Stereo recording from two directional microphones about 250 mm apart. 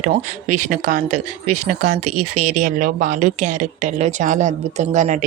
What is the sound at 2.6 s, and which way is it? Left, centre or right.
Speech, right.